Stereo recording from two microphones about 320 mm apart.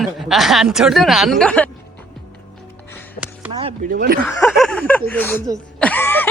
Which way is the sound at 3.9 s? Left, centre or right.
Right.